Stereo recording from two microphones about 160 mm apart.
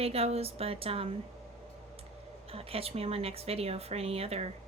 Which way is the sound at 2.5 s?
35° right (ahead or behind).